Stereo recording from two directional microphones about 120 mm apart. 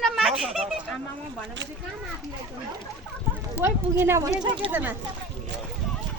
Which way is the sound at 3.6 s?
20° right (ahead or behind).